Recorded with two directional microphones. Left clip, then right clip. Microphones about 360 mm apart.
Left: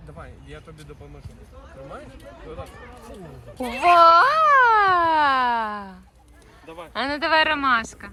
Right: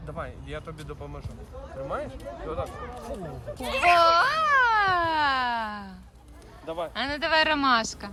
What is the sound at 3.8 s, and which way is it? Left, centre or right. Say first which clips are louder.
A child's voice: left 6 dB; centre.